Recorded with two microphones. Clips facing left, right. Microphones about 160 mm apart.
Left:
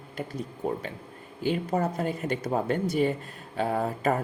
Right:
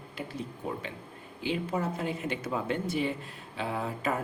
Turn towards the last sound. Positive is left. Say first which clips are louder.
# left 5 dB
turn(degrees=45)  # may be behind; listen again after turning